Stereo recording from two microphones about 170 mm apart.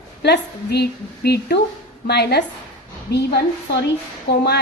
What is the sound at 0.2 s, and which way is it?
A woman's voice, 80° left.